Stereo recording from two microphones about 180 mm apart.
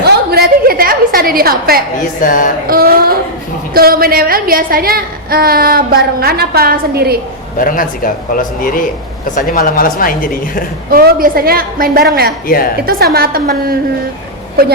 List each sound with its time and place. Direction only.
0.0 s a sound: 60° right (ahead or behind)
2.0 s speech: 50° left (ahead or behind)
2.6 s a woman's voice: 55° right (ahead or behind)
7.6 s speech: 50° left (ahead or behind)
10.9 s a woman's voice: 55° right (ahead or behind)
12.5 s a woman's voice: 55° left (ahead or behind)
12.8 s a woman's voice: 55° right (ahead or behind)